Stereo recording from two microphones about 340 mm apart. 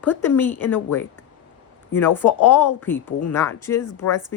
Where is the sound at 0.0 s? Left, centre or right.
Centre.